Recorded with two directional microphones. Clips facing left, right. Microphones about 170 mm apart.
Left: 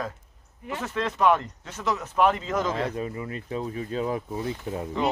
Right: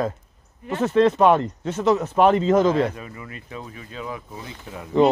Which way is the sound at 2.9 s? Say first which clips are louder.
Left 6 dB; 30° left (ahead or behind).